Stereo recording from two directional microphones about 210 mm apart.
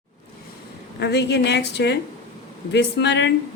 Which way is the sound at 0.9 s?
50° left (ahead or behind).